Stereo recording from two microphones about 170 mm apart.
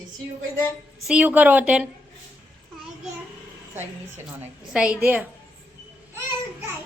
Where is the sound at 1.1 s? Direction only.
10° right (ahead or behind).